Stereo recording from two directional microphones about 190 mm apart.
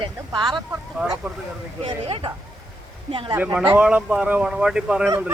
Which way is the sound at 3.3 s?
15° right (ahead or behind).